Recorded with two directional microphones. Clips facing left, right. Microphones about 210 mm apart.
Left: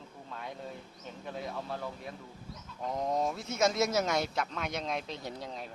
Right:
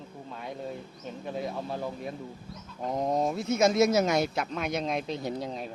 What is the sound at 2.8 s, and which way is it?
Speech, 35° right (ahead or behind).